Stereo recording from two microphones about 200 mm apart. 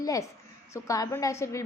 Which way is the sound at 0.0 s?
15° left (ahead or behind).